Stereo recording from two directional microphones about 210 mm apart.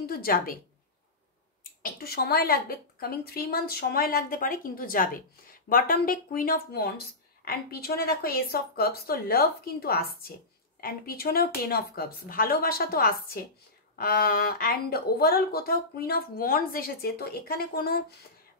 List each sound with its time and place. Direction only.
0.0 s a woman's voice: 45° left (ahead or behind)
1.8 s speech: 45° left (ahead or behind)